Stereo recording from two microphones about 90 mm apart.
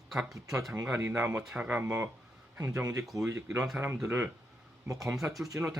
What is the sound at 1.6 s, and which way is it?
Speech, 20° right (ahead or behind).